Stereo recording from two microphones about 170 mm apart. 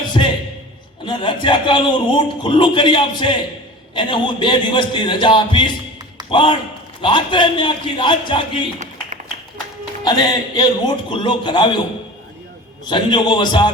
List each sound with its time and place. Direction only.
0.1 s a sound: 30° left (ahead or behind)
1.0 s a man's voice: 30° left (ahead or behind)
10.0 s a man's voice: 25° left (ahead or behind)
12.8 s a man's voice: 25° left (ahead or behind)